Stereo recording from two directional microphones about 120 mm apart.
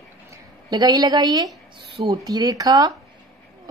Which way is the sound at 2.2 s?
30° right (ahead or behind).